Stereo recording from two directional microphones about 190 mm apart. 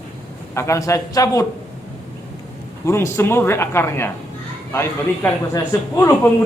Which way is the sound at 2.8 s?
15° left (ahead or behind).